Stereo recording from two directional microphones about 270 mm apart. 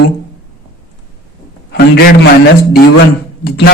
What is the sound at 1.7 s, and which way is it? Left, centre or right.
Speech, left.